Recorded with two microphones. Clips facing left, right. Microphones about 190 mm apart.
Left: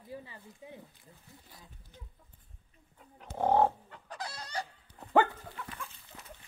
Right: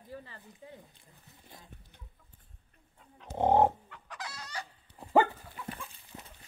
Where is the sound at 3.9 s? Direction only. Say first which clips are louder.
Left 2 dB; 30° left (ahead or behind).